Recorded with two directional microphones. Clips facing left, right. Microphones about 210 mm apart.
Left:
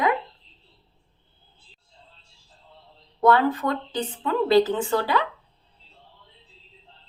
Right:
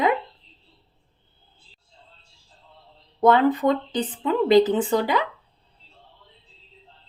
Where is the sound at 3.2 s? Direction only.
20° right (ahead or behind).